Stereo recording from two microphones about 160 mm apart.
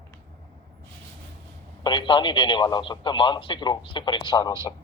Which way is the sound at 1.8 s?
30° left (ahead or behind).